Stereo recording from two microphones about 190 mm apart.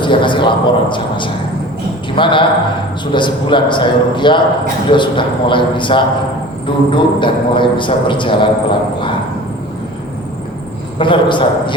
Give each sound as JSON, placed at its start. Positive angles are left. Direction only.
{"t": 0.0, "sound": "a man's voice", "side_deg": 25}
{"t": 10.9, "sound": "a man's voice", "side_deg": 25}